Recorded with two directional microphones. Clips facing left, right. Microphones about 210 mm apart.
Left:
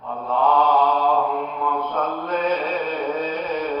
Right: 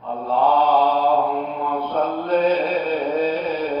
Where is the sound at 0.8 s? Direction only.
30° right (ahead or behind).